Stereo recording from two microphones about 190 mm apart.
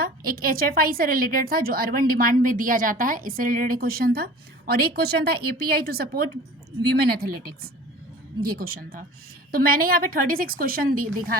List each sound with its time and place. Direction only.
0.0 s a woman's voice: 50° right (ahead or behind)
8.4 s a woman's voice: 50° right (ahead or behind)